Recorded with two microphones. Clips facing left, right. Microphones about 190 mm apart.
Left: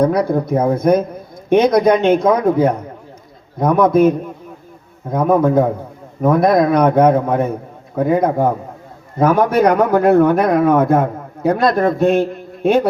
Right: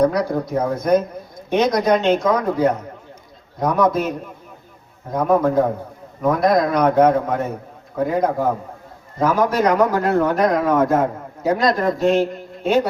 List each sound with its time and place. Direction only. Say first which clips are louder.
0.0 s a man's voice: left 3 dB; 55° left (ahead or behind)
5.1 s a man's voice: left 3 dB; 55° left (ahead or behind)